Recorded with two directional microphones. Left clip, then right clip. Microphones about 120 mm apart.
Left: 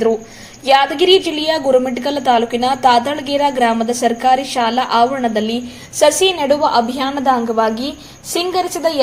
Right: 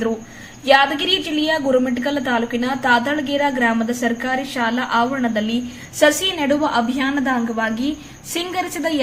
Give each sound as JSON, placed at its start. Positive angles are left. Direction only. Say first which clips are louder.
{"t": 0.6, "sound": "a woman's voice", "louder": "left 3 dB", "side_deg": 35}